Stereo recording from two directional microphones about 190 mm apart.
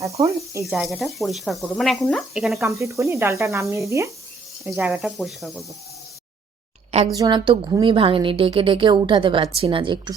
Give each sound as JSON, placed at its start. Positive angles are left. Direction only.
{"t": 0.6, "sound": "speech", "side_deg": 0}
{"t": 2.6, "sound": "speech", "side_deg": -15}
{"t": 4.6, "sound": "speech", "side_deg": -5}
{"t": 7.2, "sound": "a woman's voice", "side_deg": -25}